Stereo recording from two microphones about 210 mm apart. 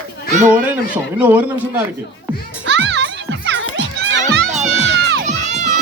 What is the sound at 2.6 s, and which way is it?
Music, 55° right (ahead or behind).